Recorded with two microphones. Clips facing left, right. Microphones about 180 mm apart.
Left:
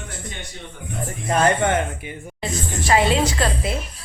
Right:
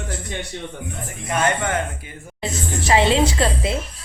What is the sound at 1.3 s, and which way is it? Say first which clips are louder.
Speech: left 3 dB; 35° left (ahead or behind).